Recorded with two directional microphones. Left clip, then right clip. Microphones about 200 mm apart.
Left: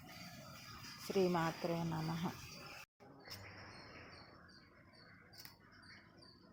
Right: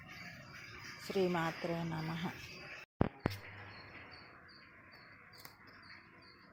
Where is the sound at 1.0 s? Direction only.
5° right (ahead or behind).